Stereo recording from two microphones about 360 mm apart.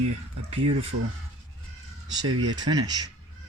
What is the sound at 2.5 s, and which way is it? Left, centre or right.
Speech, centre.